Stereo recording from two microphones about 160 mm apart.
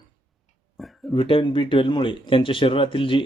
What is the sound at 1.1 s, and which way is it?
Speech, 35° left (ahead or behind).